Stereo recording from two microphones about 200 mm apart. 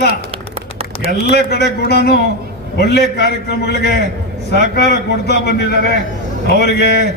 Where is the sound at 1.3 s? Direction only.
55° left (ahead or behind).